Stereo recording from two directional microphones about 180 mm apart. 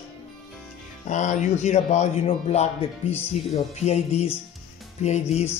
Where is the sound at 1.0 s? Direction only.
40° left (ahead or behind).